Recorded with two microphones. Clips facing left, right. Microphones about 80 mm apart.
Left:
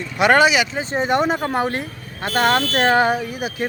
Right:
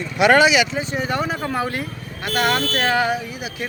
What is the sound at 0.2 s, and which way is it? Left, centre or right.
Speech, left.